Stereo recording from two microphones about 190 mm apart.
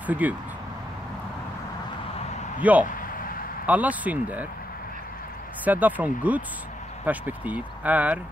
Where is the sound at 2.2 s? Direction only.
35° left (ahead or behind).